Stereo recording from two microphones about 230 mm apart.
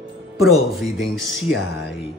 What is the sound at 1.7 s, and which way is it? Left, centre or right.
Speech, left.